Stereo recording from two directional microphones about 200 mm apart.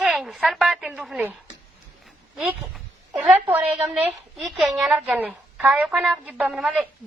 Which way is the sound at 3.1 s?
5° right (ahead or behind).